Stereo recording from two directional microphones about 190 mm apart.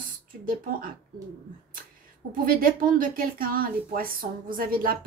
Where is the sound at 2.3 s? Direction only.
45° right (ahead or behind).